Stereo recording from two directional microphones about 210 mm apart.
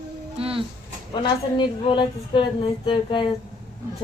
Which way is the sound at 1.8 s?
25° left (ahead or behind).